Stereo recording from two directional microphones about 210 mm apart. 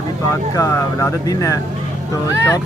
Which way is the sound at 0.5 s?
15° left (ahead or behind).